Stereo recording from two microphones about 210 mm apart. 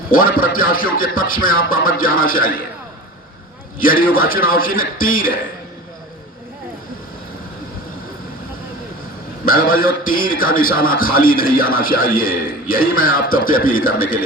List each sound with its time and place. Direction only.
0.1 s a man's voice: 40° left (ahead or behind)
3.8 s a man's voice: 40° left (ahead or behind)
9.5 s a man's voice: 40° left (ahead or behind)